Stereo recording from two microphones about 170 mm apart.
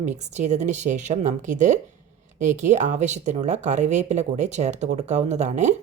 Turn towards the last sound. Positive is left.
turn(degrees=-45)  # may be behind; listen again after turning